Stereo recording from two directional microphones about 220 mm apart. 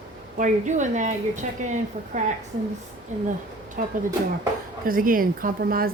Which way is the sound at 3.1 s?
35° right (ahead or behind).